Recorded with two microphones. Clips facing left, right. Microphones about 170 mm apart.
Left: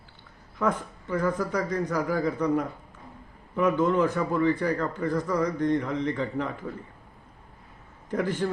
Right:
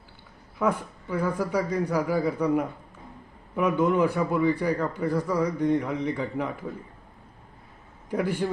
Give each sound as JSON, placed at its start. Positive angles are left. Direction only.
{"t": 0.6, "sound": "a man's voice", "side_deg": -10}
{"t": 8.1, "sound": "a man's voice", "side_deg": -10}